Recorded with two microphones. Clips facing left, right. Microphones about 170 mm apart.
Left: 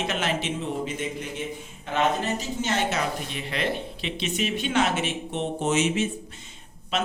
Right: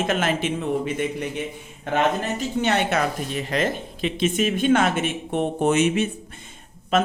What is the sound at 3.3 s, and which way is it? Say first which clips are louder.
Speech: right 5 dB; 45° right (ahead or behind).